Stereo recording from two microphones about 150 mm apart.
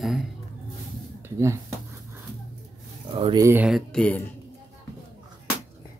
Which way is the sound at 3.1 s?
30° right (ahead or behind).